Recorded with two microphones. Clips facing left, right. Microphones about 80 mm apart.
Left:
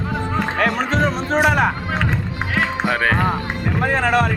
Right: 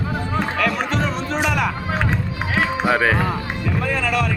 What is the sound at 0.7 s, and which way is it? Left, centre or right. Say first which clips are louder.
Music: left 3 dB; left.